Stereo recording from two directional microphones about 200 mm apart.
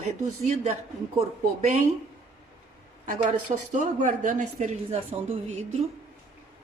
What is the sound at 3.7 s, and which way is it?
Speech, 40° right (ahead or behind).